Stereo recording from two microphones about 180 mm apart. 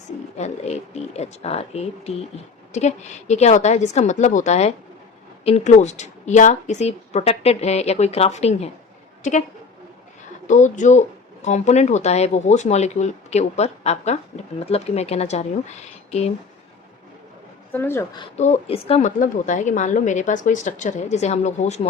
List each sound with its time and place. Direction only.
0.3 s a woman's voice: 40° left (ahead or behind)
10.4 s a woman's voice: 45° left (ahead or behind)
17.7 s speech: 10° left (ahead or behind)
18.3 s a woman's voice: 40° left (ahead or behind)